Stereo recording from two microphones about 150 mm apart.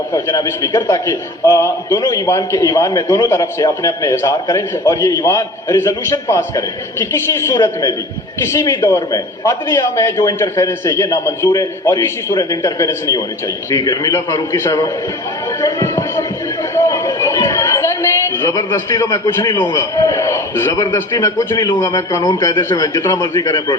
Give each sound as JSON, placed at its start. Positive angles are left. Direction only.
{"t": 0.1, "sound": "a man's voice", "side_deg": 20}
{"t": 15.6, "sound": "music", "side_deg": 20}
{"t": 16.7, "sound": "chatter", "side_deg": 20}
{"t": 19.0, "sound": "a man's voice", "side_deg": 30}